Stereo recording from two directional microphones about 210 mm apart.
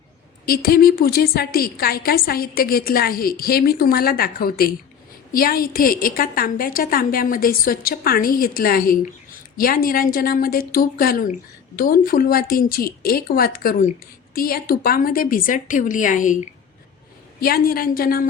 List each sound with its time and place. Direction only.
0.4 s a woman's voice: 45° left (ahead or behind)
17.4 s a woman's voice: 45° left (ahead or behind)